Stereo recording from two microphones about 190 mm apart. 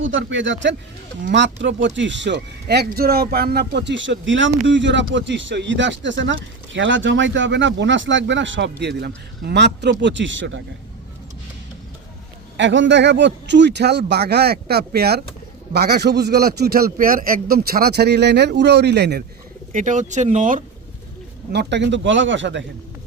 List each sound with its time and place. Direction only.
0.0 s speech: 85° right
12.5 s a man's voice: 75° right (ahead or behind)
19.7 s speech: 40° right (ahead or behind)
21.5 s speech: 65° right (ahead or behind)